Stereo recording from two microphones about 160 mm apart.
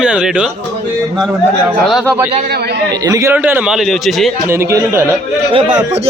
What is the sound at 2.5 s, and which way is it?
Speech, 85° right.